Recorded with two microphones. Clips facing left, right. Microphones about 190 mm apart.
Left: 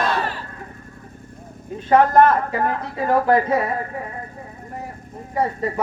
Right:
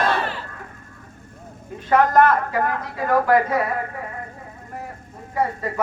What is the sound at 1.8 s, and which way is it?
A man's voice, 25° left (ahead or behind).